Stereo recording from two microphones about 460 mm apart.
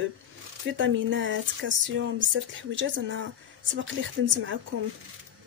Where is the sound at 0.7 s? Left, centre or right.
Right.